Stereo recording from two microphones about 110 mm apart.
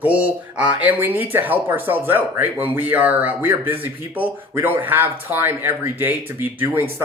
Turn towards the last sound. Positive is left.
turn(degrees=-20)  # may be behind; listen again after turning